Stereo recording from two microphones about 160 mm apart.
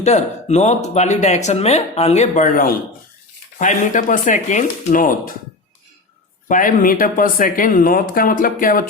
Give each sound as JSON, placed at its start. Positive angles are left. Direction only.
{"t": 0.0, "sound": "speech", "side_deg": 45}
{"t": 6.5, "sound": "speech", "side_deg": 60}